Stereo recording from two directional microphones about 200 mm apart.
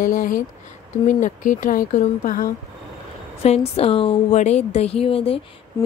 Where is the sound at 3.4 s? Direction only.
30° left (ahead or behind).